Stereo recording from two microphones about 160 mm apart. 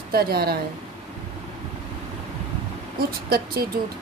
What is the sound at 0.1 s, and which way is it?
Speech, 75° right (ahead or behind).